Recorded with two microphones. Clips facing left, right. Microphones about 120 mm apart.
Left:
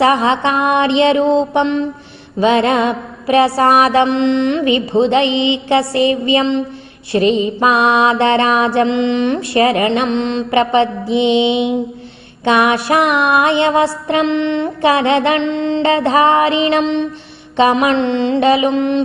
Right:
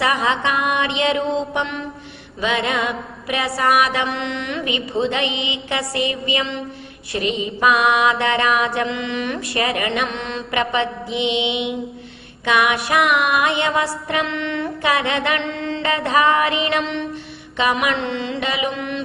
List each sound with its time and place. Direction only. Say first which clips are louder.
0.0 s mantra: left 7 dB; 30° left (ahead or behind)